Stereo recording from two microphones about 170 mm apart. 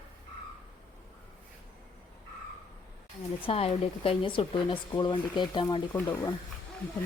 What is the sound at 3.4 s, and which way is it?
Speech, 35° left (ahead or behind).